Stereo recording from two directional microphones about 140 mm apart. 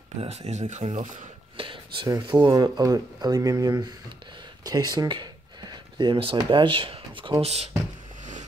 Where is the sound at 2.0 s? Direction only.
25° right (ahead or behind); by 7.7 s 45° right (ahead or behind).